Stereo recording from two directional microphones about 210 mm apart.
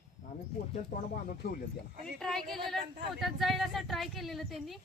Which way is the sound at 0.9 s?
50° left (ahead or behind).